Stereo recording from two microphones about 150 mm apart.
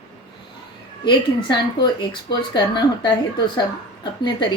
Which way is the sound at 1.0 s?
30° left (ahead or behind).